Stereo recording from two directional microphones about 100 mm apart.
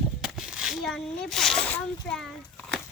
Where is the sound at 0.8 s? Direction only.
5° left (ahead or behind).